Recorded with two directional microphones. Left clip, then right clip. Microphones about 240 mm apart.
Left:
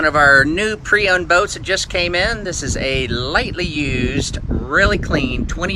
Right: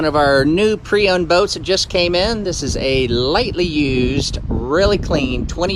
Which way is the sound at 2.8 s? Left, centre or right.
Right.